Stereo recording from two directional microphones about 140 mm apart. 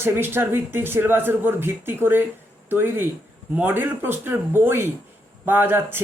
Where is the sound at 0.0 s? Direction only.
15° right (ahead or behind).